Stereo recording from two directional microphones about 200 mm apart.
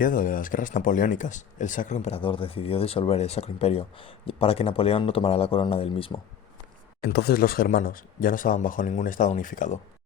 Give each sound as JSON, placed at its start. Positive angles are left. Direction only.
{"t": 0.0, "sound": "speech", "side_deg": 40}
{"t": 7.0, "sound": "speech", "side_deg": 55}